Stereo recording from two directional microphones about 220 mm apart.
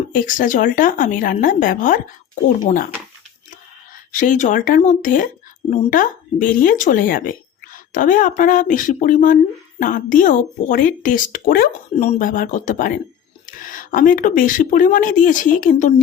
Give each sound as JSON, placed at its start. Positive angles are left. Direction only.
{"t": 0.1, "sound": "speech", "side_deg": 35}
{"t": 4.1, "sound": "speech", "side_deg": 35}